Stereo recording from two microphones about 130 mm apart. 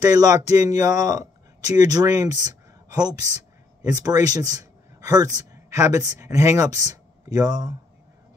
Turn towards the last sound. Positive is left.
turn(degrees=-30)  # may be behind; listen again after turning